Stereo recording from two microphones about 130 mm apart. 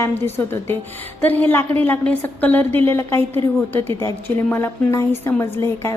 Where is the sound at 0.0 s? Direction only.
15° left (ahead or behind).